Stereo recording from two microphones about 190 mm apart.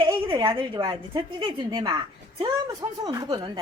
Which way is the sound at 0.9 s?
25° right (ahead or behind).